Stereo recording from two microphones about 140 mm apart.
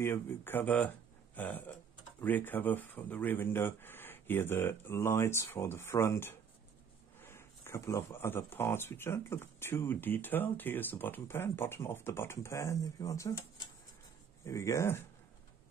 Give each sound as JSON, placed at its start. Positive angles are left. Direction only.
{"t": 0.0, "sound": "speech", "side_deg": 15}
{"t": 14.4, "sound": "speech", "side_deg": 20}